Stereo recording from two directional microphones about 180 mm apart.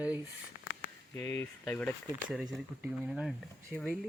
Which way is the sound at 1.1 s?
15° left (ahead or behind).